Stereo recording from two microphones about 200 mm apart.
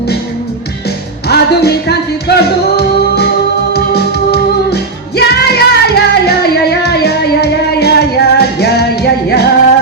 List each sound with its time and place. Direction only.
1.3 s music: 55° left (ahead or behind)